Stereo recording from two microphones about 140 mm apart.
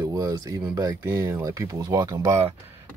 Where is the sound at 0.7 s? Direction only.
20° right (ahead or behind).